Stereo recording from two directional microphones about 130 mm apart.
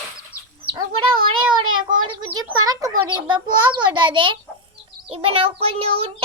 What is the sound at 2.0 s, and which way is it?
Speech, 40° right (ahead or behind).